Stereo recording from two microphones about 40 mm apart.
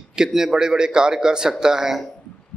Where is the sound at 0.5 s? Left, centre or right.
Centre.